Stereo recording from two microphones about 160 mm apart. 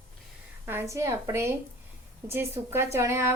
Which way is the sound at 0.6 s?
15° right (ahead or behind).